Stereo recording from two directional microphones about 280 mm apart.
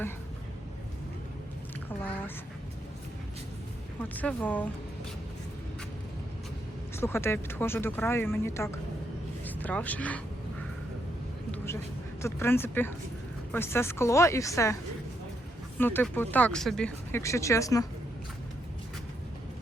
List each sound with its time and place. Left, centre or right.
2.0 s a sound: centre
4.1 s speech: centre
7.0 s speech: centre
11.5 s a sound: centre
12.2 s speech: centre
15.8 s speech: centre